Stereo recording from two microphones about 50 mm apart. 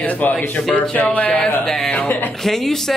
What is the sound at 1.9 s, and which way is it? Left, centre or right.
Speech, left.